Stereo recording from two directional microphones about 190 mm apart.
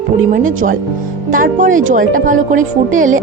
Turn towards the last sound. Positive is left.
turn(degrees=-45)  # may be behind; listen again after turning